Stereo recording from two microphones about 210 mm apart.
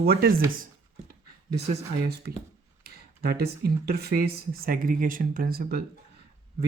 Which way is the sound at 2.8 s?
45° right (ahead or behind).